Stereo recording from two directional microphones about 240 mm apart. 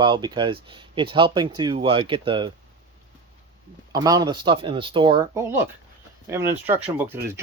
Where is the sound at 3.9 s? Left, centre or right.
Centre.